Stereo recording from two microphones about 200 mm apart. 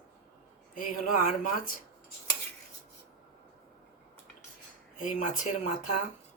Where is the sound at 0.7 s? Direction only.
45° left (ahead or behind).